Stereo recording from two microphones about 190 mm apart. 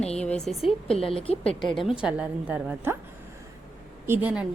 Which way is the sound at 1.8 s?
5° right (ahead or behind).